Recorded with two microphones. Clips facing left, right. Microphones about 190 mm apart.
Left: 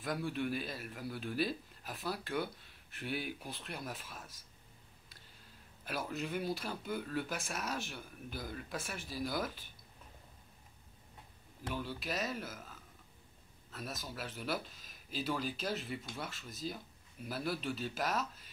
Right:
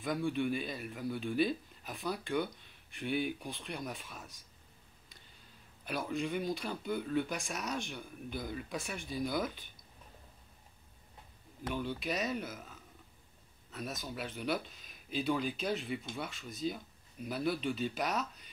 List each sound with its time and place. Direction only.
0.0 s speech: centre (ahead or behind)
5.9 s speech: centre (ahead or behind)
11.7 s speech: centre (ahead or behind)